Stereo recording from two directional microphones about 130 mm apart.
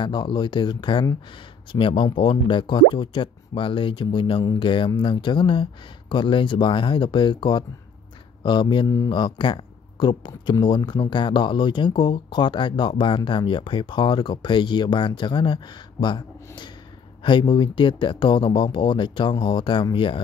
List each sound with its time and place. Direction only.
0.0 s speech: 35° left (ahead or behind)